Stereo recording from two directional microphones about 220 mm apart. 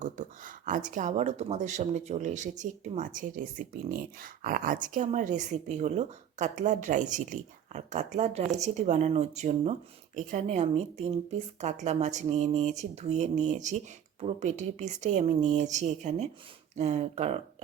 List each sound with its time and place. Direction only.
0.0 s speech: 35° right (ahead or behind)